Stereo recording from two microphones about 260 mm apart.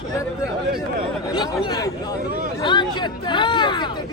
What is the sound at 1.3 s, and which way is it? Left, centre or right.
Speech, centre.